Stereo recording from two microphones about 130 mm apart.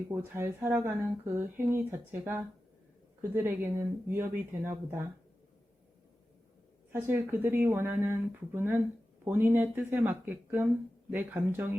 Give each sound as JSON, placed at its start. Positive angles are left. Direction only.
{"t": 0.1, "sound": "speech", "side_deg": -20}
{"t": 6.9, "sound": "speech", "side_deg": -15}